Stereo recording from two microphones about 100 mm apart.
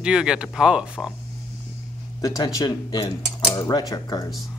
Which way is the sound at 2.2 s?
35° left (ahead or behind).